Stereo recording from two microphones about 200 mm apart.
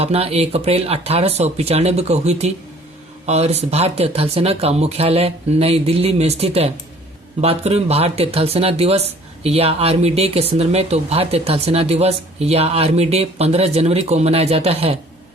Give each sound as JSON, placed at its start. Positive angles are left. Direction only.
{"t": 0.0, "sound": "speech", "side_deg": -30}